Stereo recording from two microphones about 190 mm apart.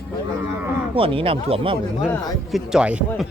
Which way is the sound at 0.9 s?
30° right (ahead or behind).